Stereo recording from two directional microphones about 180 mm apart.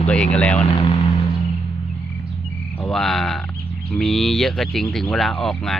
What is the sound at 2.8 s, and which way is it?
Speech, centre (ahead or behind).